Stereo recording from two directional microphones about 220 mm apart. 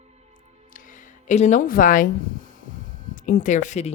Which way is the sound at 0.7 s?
35° left (ahead or behind).